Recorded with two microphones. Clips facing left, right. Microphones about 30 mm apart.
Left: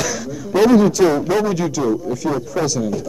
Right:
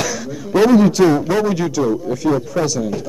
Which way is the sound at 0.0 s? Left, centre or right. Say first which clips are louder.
Right 1 dB; centre.